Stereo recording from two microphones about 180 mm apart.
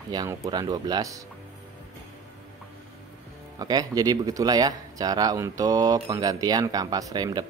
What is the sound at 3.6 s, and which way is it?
Speech, 20° right (ahead or behind).